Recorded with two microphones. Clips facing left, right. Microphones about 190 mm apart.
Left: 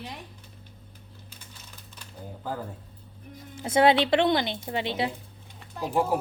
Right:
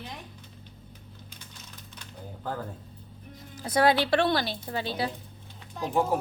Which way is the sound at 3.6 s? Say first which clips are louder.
Left 3 dB; 25° left (ahead or behind).